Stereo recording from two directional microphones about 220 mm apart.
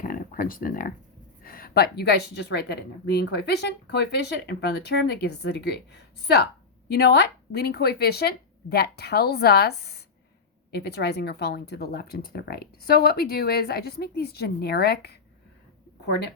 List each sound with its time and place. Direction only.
0.0 s a woman's voice: 40° left (ahead or behind)